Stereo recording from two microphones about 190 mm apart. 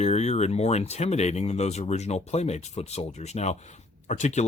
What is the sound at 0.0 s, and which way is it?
Speech, 35° left (ahead or behind).